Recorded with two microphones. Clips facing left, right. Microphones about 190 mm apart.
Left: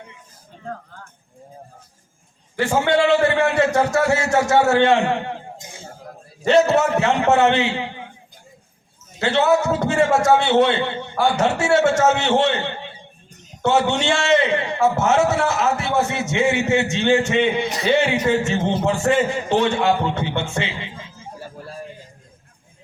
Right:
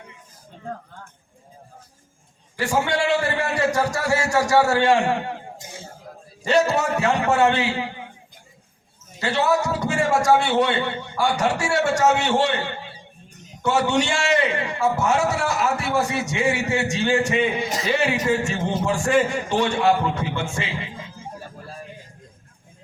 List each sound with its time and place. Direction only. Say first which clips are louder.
2.6 s a man's voice: left 5 dB; 25° left (ahead or behind)
6.5 s a man's voice: left 4 dB; 25° left (ahead or behind)
9.2 s a man's voice: left 4 dB; 25° left (ahead or behind)